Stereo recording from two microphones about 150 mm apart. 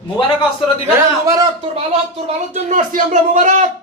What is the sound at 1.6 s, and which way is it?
Speech, 40° right (ahead or behind).